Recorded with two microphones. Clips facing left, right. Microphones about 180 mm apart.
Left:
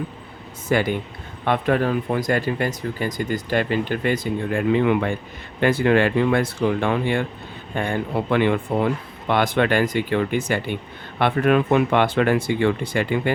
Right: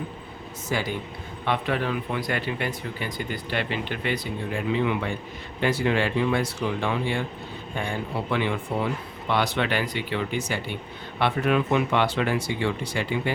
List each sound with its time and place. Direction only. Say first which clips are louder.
0.7 s speech: left 8 dB; 60° left (ahead or behind)
1.5 s speech: left 6 dB; 45° left (ahead or behind)